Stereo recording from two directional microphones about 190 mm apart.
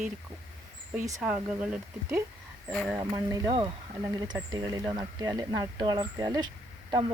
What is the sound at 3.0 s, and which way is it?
Speech, 20° right (ahead or behind).